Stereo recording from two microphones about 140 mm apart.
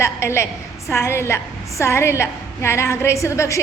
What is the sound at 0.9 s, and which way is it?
A woman's voice, 20° left (ahead or behind).